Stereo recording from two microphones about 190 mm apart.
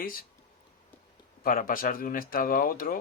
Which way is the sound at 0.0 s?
50° left (ahead or behind).